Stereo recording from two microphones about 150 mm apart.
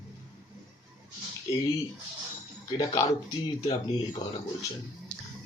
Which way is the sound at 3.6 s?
25° left (ahead or behind).